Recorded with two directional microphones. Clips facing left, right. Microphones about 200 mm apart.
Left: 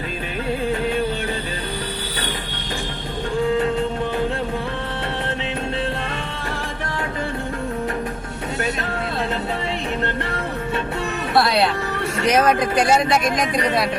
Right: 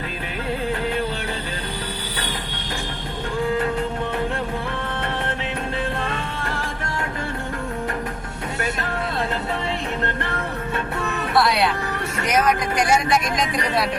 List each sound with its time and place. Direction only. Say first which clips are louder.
11.3 s music: left 2 dB; 25° left (ahead or behind)
12.2 s speech: left 3 dB; 30° left (ahead or behind)